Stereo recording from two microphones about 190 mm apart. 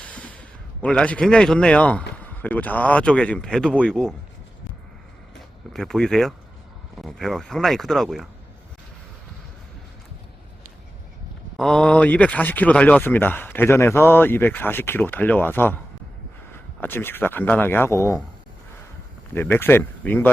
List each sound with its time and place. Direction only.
0.0 s a sound: 5° left (ahead or behind)
2.2 s speech: 10° left (ahead or behind)
5.3 s speech: centre (ahead or behind)
11.5 s speech: 5° left (ahead or behind)
16.8 s speech: 10° left (ahead or behind)
19.3 s speech: 10° left (ahead or behind)